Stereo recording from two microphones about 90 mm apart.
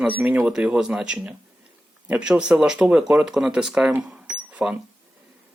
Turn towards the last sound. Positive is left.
turn(degrees=-10)  # may be behind; listen again after turning